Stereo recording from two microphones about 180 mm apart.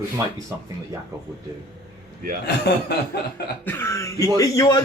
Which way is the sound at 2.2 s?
55° right (ahead or behind).